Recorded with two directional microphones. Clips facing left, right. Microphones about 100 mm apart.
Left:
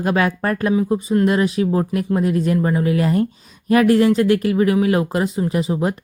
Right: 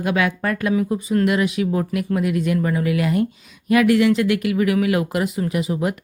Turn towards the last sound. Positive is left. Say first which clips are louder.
# left 2 dB
turn(degrees=30)  # may be behind; listen again after turning